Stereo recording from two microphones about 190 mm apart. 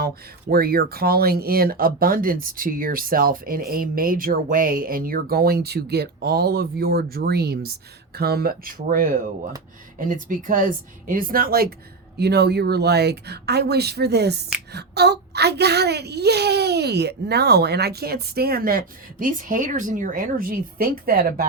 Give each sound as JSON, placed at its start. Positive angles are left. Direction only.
{"t": 0.5, "sound": "speech", "side_deg": -55}